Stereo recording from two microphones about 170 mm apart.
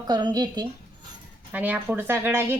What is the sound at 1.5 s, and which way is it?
A woman's voice, 10° right (ahead or behind).